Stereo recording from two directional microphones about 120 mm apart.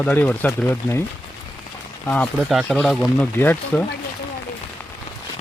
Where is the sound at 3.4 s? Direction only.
15° left (ahead or behind).